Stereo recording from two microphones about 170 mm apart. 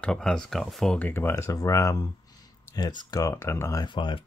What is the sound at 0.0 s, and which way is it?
Speech, 5° left (ahead or behind).